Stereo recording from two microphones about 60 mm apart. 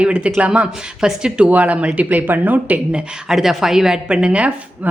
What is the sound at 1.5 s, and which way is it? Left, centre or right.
Speech, right.